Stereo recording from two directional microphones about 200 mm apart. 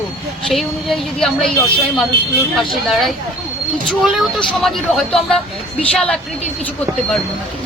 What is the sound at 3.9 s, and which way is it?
A woman's voice, centre (ahead or behind).